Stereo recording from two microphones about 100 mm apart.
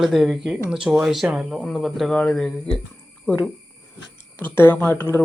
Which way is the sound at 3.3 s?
20° left (ahead or behind).